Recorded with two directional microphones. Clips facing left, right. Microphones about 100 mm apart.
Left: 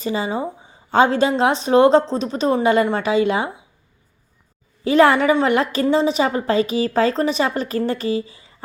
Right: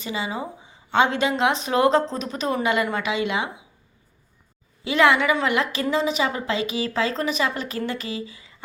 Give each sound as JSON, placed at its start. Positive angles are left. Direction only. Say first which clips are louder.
{"t": 0.0, "sound": "a woman's voice", "louder": "left 6 dB", "side_deg": 35}
{"t": 4.8, "sound": "a woman's voice", "louder": "left 5 dB", "side_deg": 40}